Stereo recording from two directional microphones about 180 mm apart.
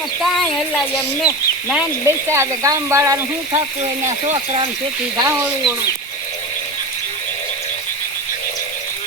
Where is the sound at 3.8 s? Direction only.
40° right (ahead or behind).